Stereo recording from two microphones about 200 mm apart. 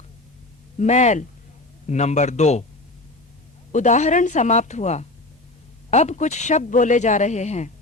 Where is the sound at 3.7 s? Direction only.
35° left (ahead or behind).